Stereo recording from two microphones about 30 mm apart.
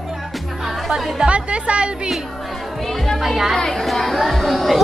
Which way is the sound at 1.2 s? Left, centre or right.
Right.